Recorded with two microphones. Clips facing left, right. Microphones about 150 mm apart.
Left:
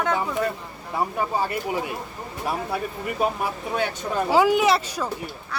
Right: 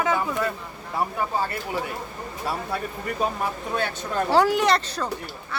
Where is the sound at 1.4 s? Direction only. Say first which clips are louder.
Left 2 dB; 15° left (ahead or behind).